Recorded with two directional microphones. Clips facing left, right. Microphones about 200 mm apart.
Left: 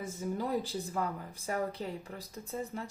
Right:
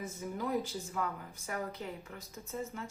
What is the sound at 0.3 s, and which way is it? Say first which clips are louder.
A woman's voice: even; 30° left (ahead or behind).